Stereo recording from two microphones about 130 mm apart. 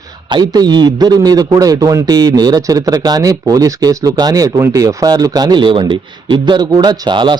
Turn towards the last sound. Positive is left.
turn(degrees=-35)  # may be behind; listen again after turning